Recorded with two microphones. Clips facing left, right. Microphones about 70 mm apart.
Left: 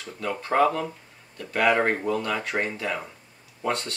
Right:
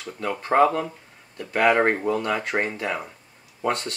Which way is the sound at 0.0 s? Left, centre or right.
Centre.